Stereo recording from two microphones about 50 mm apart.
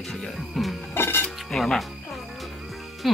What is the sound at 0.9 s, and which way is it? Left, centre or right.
Music, left.